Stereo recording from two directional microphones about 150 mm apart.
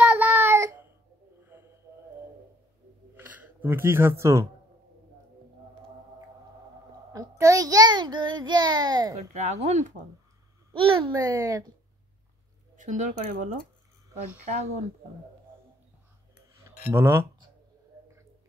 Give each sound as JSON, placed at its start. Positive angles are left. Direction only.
{"t": 0.0, "sound": "child singing", "side_deg": -10}
{"t": 3.2, "sound": "speech", "side_deg": -10}
{"t": 7.1, "sound": "child singing", "side_deg": -20}
{"t": 9.3, "sound": "speech", "side_deg": -50}
{"t": 10.7, "sound": "a child's voice", "side_deg": -35}
{"t": 11.1, "sound": "speech", "side_deg": -25}
{"t": 12.7, "sound": "speech", "side_deg": -55}
{"t": 16.6, "sound": "speech", "side_deg": -15}